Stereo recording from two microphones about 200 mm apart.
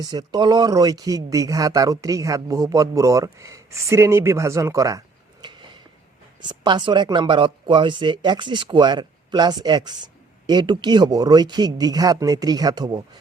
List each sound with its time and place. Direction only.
0.0 s speech: 20° right (ahead or behind)